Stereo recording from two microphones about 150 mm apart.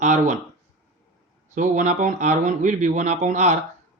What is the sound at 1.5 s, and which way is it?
Speech, 60° right (ahead or behind).